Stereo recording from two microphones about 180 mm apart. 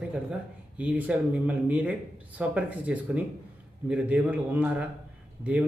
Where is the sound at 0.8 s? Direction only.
10° right (ahead or behind).